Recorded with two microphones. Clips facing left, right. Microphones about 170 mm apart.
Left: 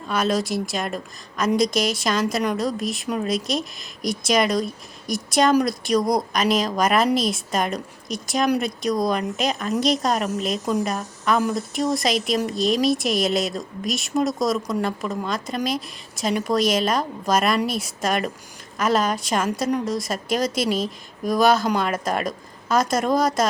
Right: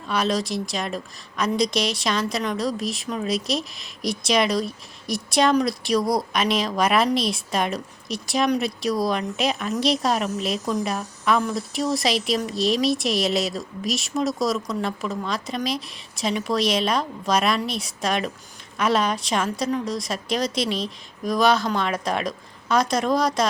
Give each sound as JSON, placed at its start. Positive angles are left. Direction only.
{"t": 0.1, "sound": "speech", "side_deg": 0}